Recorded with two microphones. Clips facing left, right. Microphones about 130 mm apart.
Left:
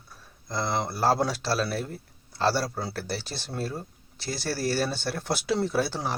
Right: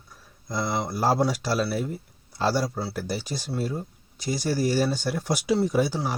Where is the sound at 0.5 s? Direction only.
15° right (ahead or behind).